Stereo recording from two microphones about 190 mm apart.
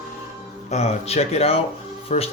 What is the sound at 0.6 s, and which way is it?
Speech, 35° left (ahead or behind).